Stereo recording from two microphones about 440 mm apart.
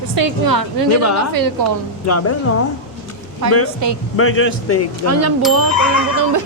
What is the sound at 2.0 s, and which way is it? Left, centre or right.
Speech, left.